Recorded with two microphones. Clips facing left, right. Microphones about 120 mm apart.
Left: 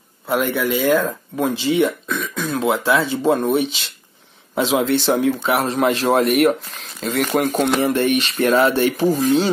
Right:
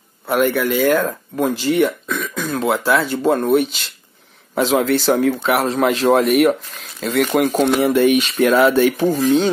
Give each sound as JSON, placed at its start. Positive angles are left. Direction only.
{"t": 0.3, "sound": "speech", "side_deg": 0}